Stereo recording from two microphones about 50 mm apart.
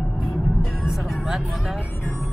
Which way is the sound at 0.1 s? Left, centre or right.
Centre.